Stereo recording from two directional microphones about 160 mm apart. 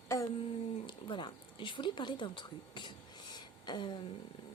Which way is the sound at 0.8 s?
30° left (ahead or behind).